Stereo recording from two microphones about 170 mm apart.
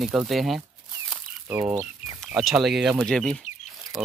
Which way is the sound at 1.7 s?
Centre (ahead or behind).